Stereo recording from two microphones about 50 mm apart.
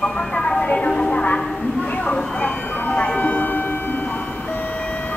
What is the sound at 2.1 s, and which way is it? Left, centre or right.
Music, centre.